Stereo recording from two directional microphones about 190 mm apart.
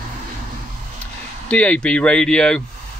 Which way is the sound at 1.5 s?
5° left (ahead or behind).